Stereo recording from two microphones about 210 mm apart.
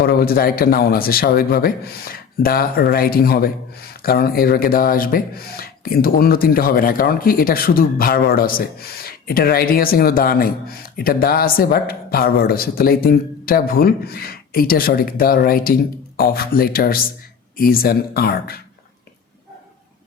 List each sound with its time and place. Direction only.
0.0 s a man's voice: 45° left (ahead or behind)